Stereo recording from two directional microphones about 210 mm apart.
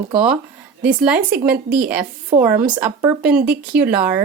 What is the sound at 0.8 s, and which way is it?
Speech, 5° right (ahead or behind).